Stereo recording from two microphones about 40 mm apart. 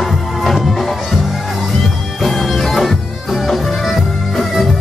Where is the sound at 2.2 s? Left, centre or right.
Centre.